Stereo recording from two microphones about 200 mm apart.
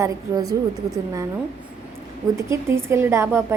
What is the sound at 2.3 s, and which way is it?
A woman's voice, 15° right (ahead or behind).